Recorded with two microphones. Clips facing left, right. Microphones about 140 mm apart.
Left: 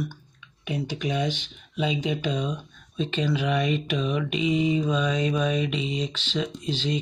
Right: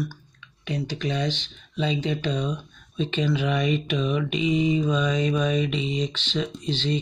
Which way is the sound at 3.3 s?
5° left (ahead or behind).